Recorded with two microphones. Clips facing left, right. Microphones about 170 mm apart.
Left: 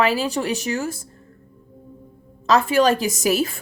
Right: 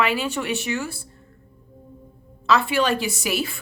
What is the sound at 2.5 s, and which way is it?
Speech, 40° left (ahead or behind).